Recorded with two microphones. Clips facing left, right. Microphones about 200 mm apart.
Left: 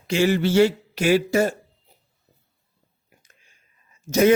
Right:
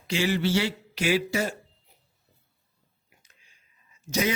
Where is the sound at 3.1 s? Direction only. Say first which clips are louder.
Left 5 dB; 50° left (ahead or behind).